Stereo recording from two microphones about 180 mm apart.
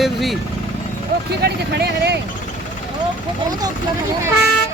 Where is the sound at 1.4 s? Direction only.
65° right (ahead or behind).